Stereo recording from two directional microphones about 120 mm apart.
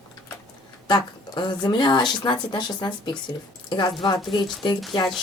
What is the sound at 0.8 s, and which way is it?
Speech, 40° left (ahead or behind).